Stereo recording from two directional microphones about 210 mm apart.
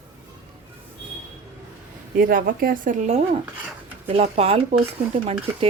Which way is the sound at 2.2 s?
40° right (ahead or behind).